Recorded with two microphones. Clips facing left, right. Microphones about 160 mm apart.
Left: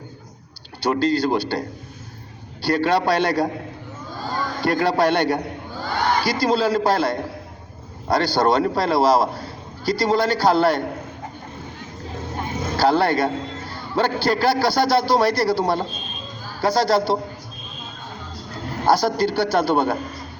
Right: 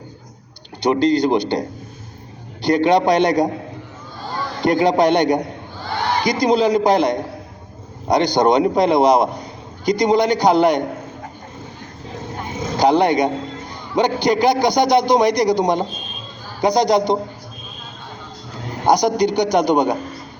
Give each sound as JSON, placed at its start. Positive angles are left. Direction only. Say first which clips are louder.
{"t": 0.8, "sound": "a man's voice", "louder": "right 4 dB", "side_deg": -20}
{"t": 4.6, "sound": "a man's voice", "louder": "right 4 dB", "side_deg": -20}
{"t": 12.7, "sound": "a man's voice", "louder": "right 3 dB", "side_deg": -20}
{"t": 18.9, "sound": "a man's voice", "louder": "right 3 dB", "side_deg": -15}